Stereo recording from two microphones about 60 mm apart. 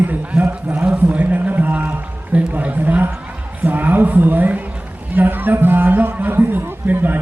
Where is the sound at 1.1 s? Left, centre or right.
Right.